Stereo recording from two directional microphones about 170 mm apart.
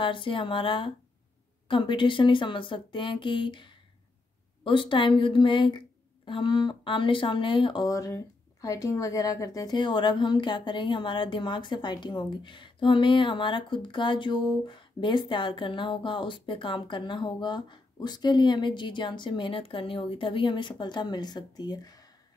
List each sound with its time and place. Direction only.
0.0 s speech: 30° left (ahead or behind)